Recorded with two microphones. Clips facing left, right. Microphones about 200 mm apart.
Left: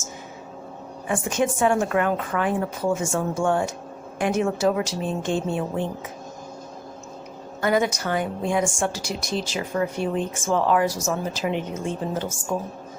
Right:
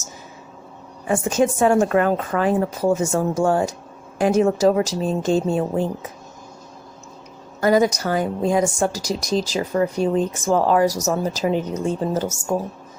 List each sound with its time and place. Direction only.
1.0 s a woman's voice: 40° right (ahead or behind)
7.6 s a woman's voice: 40° right (ahead or behind)